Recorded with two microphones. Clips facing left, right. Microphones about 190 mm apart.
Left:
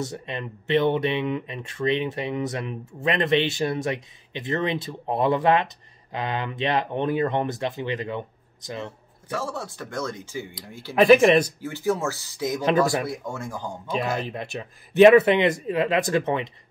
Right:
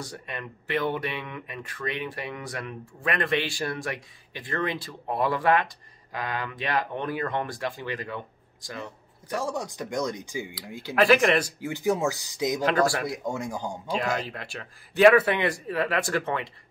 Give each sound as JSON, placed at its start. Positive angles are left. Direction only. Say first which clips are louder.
{"t": 0.0, "sound": "speech", "louder": "left 6 dB", "side_deg": 25}
{"t": 9.3, "sound": "speech", "louder": "even", "side_deg": -15}
{"t": 11.0, "sound": "speech", "louder": "left 5 dB", "side_deg": 20}
{"t": 11.6, "sound": "speech", "louder": "even", "side_deg": -15}
{"t": 12.6, "sound": "speech", "louder": "left 4 dB", "side_deg": 20}
{"t": 13.1, "sound": "speech", "louder": "right 1 dB", "side_deg": -15}
{"t": 13.9, "sound": "speech", "louder": "left 2 dB", "side_deg": 15}